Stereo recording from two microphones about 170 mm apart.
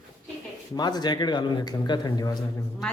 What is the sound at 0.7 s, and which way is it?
Speech, 25° left (ahead or behind).